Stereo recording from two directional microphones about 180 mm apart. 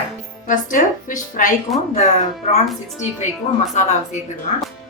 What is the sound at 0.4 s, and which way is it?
A woman's voice, 45° left (ahead or behind).